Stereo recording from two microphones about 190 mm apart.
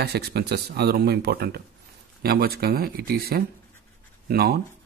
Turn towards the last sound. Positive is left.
turn(degrees=-55)  # may be behind; listen again after turning